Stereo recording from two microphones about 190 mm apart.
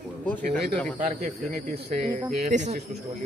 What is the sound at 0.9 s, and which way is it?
Speech, 45° right (ahead or behind).